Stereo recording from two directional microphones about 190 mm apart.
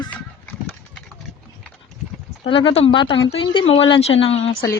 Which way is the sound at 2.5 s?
25° left (ahead or behind).